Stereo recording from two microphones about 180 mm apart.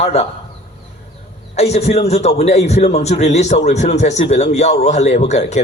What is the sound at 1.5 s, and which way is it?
A man's voice, 35° left (ahead or behind).